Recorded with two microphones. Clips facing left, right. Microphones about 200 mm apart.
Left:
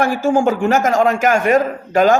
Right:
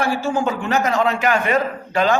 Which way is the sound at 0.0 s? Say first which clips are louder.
Left 5 dB; 50° left (ahead or behind).